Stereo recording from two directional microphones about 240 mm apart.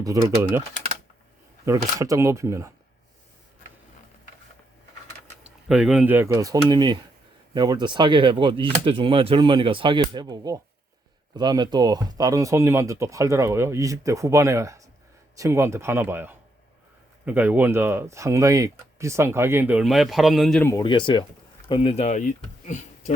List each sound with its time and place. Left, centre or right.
0.0 s speech: centre
1.6 s speech: centre
5.4 s speech: centre; by 23.1 s left